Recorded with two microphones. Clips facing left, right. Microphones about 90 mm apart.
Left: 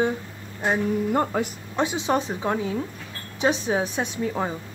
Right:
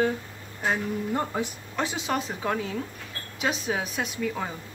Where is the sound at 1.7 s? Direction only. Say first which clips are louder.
Left 6 dB; 20° left (ahead or behind).